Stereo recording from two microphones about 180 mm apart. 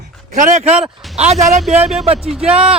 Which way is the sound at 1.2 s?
35° right (ahead or behind).